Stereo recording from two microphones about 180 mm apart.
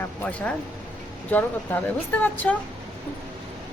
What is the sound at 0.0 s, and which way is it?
Speech, 10° left (ahead or behind).